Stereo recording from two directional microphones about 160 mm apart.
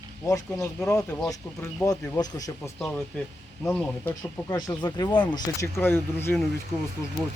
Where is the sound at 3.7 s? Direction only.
5° left (ahead or behind).